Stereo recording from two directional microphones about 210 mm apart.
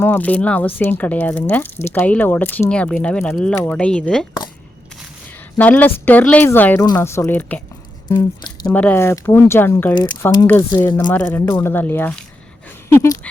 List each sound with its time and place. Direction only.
0.0 s speech: 10° left (ahead or behind)
5.5 s speech: 5° left (ahead or behind)
8.0 s speech: 20° left (ahead or behind)
8.6 s speech: 5° left (ahead or behind)
9.9 s speech: 20° left (ahead or behind)
10.2 s speech: 10° left (ahead or behind)